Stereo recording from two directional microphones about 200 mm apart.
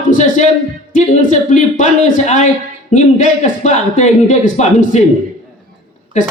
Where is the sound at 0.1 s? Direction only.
40° left (ahead or behind).